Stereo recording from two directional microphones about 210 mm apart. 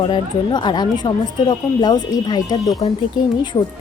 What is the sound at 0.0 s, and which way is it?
A woman's voice, 20° left (ahead or behind).